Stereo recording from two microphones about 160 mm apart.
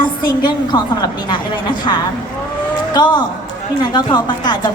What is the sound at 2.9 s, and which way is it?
A woman's voice, 25° left (ahead or behind).